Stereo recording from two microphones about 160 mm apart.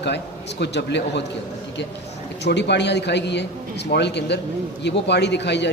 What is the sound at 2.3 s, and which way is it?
A man's voice, 90° left.